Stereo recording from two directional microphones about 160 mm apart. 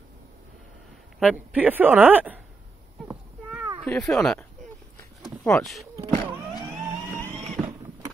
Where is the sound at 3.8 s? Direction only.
5° left (ahead or behind).